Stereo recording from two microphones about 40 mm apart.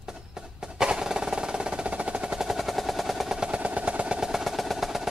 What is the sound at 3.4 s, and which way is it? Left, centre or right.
Vehicle, right.